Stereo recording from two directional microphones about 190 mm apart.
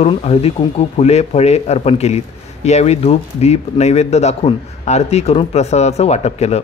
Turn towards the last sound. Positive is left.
turn(degrees=35)  # may be behind; listen again after turning